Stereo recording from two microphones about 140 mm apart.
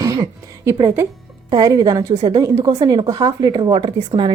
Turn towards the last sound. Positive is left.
turn(degrees=-35)  # may be behind; listen again after turning